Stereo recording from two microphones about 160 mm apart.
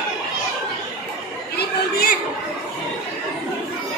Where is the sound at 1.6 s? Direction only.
75° left (ahead or behind).